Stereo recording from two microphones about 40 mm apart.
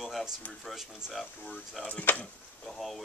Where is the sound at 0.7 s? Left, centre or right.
Centre.